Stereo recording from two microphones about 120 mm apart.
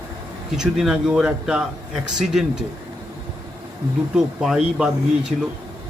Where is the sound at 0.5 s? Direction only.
5° right (ahead or behind).